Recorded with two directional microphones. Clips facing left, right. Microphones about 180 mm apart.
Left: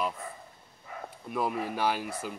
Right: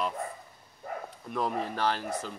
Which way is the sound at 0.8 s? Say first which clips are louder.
Right 7 dB; 50° right (ahead or behind).